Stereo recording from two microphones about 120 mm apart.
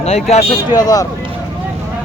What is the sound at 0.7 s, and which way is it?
Speech, 30° left (ahead or behind).